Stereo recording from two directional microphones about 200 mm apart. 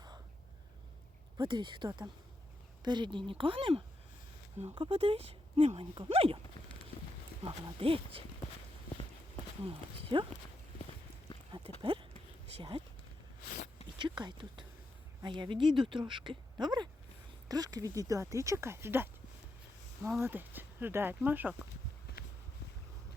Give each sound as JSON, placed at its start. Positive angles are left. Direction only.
{"t": 1.4, "sound": "speech", "side_deg": -25}
{"t": 6.9, "sound": "livestock", "side_deg": 45}
{"t": 7.4, "sound": "speech", "side_deg": -30}
{"t": 9.6, "sound": "speech", "side_deg": -25}
{"t": 11.8, "sound": "a sound", "side_deg": -25}
{"t": 13.5, "sound": "a sound", "side_deg": 35}
{"t": 14.0, "sound": "speech", "side_deg": -25}
{"t": 20.2, "sound": "speech", "side_deg": -10}
{"t": 22.1, "sound": "a sound", "side_deg": 55}